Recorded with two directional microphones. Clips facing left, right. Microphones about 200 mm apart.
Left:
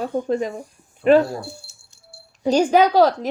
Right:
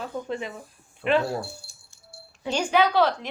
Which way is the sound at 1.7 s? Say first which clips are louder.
Left 1 dB; 25° left (ahead or behind).